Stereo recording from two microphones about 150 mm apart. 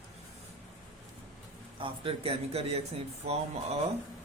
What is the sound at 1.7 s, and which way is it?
Speech, 35° right (ahead or behind).